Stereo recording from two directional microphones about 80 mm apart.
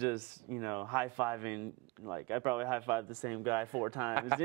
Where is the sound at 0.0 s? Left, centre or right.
Right.